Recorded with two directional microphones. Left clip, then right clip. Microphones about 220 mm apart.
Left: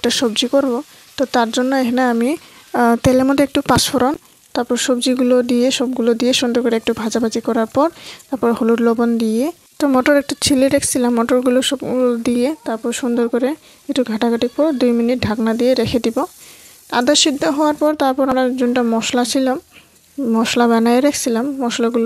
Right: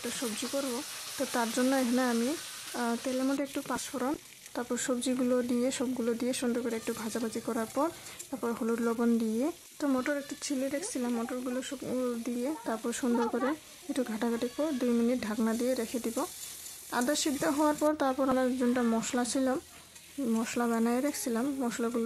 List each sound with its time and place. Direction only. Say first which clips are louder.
0.0 s a woman's voice: left 19 dB; 35° left (ahead or behind)